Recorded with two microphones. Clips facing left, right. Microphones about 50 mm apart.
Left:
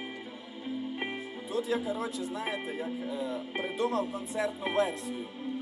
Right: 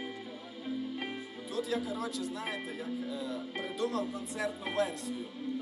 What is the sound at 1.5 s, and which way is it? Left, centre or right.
Speech, left.